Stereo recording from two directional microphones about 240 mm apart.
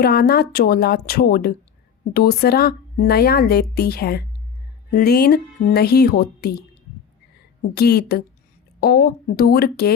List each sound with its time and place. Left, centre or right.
0.0 s speech: left
7.8 s speech: left